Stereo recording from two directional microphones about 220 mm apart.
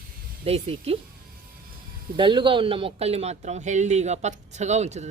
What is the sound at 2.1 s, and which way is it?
Speech, 20° right (ahead or behind).